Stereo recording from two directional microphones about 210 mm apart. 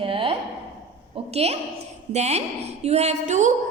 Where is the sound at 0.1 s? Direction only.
25° right (ahead or behind).